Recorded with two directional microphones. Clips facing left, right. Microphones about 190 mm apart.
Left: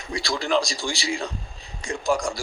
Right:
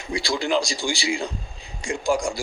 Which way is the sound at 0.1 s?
30° right (ahead or behind).